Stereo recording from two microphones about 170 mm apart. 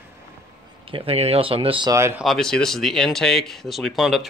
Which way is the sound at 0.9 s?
35° right (ahead or behind).